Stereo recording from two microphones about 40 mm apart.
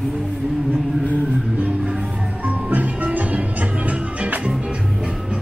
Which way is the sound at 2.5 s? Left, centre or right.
Right.